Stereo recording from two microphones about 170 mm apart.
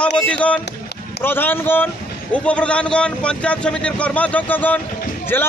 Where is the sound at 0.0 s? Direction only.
5° left (ahead or behind).